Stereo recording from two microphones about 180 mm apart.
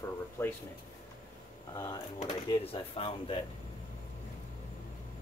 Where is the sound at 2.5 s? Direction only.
30° left (ahead or behind).